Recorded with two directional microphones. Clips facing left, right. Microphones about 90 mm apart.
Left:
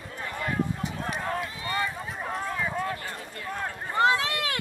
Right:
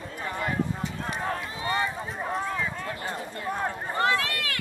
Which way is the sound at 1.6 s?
25° right (ahead or behind).